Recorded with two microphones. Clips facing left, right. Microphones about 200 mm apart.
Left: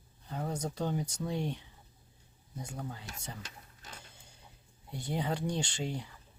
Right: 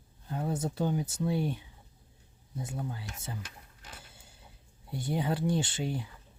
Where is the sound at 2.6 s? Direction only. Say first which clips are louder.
Right 4 dB; 5° right (ahead or behind).